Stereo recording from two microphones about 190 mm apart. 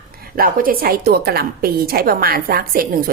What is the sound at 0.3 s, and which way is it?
A woman's voice, 50° right (ahead or behind).